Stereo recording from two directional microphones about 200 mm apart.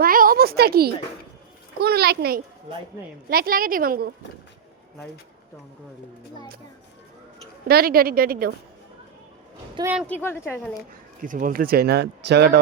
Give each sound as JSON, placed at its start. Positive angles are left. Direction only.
{"t": 0.0, "sound": "a sound", "side_deg": -45}
{"t": 1.8, "sound": "speech", "side_deg": -50}
{"t": 7.7, "sound": "speech", "side_deg": -50}
{"t": 10.1, "sound": "a woman's voice", "side_deg": 10}
{"t": 11.2, "sound": "speech", "side_deg": -40}